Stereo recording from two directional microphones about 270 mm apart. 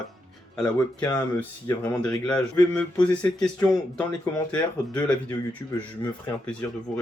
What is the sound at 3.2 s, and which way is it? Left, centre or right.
Speech, centre.